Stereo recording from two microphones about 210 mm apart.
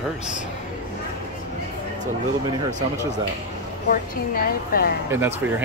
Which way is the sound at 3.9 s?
45° left (ahead or behind).